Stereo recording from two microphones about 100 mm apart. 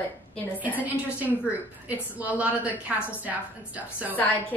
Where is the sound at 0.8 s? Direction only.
15° right (ahead or behind).